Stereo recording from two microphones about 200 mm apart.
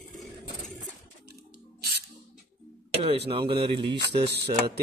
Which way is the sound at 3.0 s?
30° right (ahead or behind).